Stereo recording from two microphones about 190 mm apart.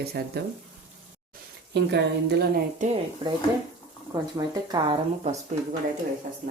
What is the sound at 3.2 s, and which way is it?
Speech, 30° right (ahead or behind).